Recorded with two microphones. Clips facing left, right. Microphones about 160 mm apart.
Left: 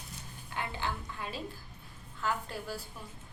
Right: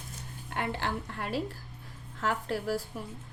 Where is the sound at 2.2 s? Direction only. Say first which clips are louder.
Right 4 dB; 85° right.